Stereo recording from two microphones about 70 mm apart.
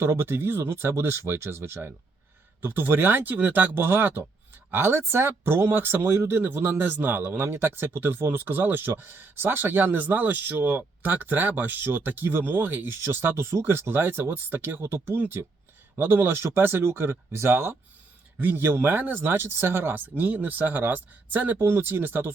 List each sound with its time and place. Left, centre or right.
0.0 s speech: right